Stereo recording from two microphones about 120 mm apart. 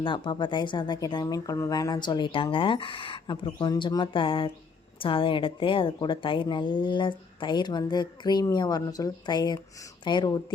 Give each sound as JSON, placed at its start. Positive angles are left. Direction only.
{"t": 0.0, "sound": "speech", "side_deg": 40}